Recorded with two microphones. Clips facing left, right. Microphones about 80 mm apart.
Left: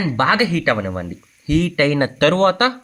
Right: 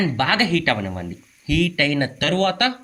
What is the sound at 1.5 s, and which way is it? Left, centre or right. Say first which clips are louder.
Speech: left 4 dB; left.